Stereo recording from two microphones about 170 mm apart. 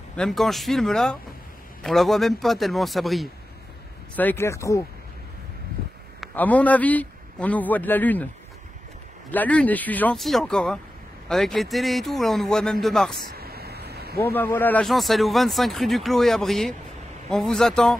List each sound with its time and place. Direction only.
0.1 s speech: 5° left (ahead or behind)
4.1 s a man's voice: 10° left (ahead or behind)
6.3 s a man's voice: 10° left (ahead or behind)
9.3 s a man's voice: 10° left (ahead or behind)
13.4 s a sound: 65° right (ahead or behind)
14.2 s speech: 15° left (ahead or behind)